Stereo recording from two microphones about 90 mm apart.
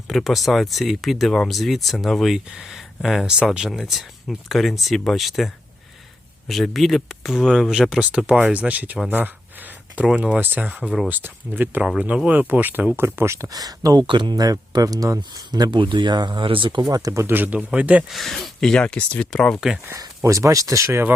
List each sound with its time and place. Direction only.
0.1 s speech: centre (ahead or behind)
6.5 s speech: centre (ahead or behind); by 14.0 s 45° right (ahead or behind)
14.1 s speech: 65° right (ahead or behind)
14.3 s speech: 45° right (ahead or behind); by 16.8 s 65° right (ahead or behind)
16.8 s speech: 45° right (ahead or behind)
17.3 s speech: 20° right (ahead or behind)
18.1 s speech: centre (ahead or behind)
20.0 s speech: 35° right (ahead or behind)